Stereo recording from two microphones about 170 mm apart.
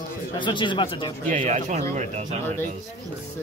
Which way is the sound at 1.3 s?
45° right (ahead or behind).